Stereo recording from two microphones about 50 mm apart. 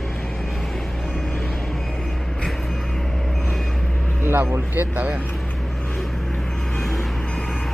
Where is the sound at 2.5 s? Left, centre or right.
Centre.